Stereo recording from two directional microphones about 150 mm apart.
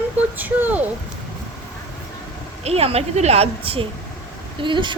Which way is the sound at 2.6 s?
40° right (ahead or behind).